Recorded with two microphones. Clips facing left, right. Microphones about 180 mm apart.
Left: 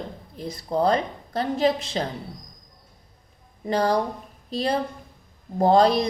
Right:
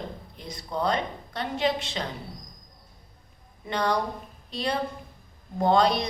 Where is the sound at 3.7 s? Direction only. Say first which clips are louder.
Left 5 dB; 35° left (ahead or behind).